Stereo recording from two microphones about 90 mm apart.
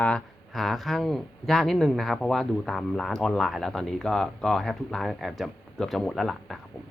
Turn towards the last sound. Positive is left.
turn(degrees=0)  # may be behind; listen again after turning